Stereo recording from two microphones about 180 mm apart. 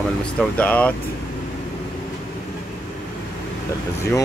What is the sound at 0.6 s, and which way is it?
Speech, 10° left (ahead or behind).